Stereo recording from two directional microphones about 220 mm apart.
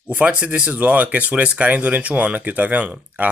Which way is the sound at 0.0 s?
5° right (ahead or behind).